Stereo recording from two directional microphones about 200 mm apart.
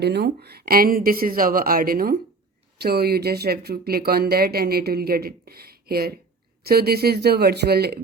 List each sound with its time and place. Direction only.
0.0 s speech: 55° right (ahead or behind)